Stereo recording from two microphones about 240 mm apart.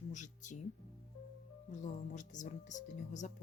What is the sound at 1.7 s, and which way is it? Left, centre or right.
Speech, left.